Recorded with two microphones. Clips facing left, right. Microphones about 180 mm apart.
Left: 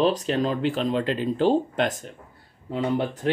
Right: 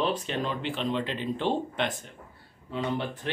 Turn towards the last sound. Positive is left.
turn(degrees=45)  # may be behind; listen again after turning